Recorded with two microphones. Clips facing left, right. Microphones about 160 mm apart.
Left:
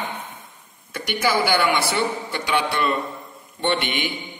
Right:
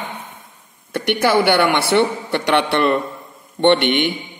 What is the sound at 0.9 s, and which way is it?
Speech, 65° right (ahead or behind).